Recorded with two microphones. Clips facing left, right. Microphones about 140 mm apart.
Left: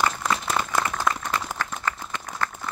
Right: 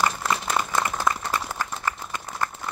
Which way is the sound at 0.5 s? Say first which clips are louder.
Even; 10° right (ahead or behind).